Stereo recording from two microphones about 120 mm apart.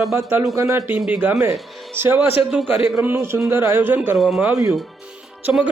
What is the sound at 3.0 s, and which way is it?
Speech, 20° right (ahead or behind).